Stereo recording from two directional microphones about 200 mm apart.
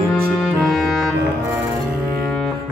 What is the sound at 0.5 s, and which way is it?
Clarinet, centre (ahead or behind).